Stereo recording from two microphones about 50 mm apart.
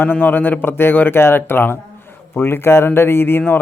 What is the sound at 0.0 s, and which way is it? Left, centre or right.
Speech, left.